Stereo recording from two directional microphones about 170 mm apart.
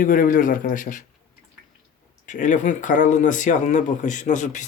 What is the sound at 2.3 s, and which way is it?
Speech, 50° left (ahead or behind).